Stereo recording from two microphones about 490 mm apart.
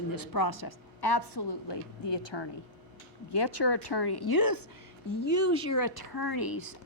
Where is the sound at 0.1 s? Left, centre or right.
Left.